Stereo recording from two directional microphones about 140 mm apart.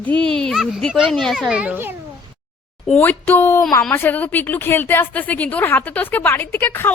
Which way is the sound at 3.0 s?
15° left (ahead or behind).